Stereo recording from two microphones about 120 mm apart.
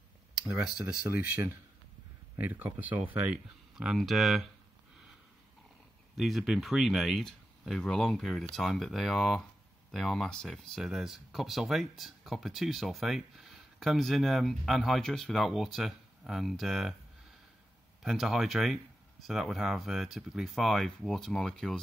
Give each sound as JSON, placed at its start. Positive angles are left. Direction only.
{"t": 1.2, "sound": "speech", "side_deg": -20}
{"t": 6.1, "sound": "speech", "side_deg": 0}
{"t": 18.0, "sound": "speech", "side_deg": 0}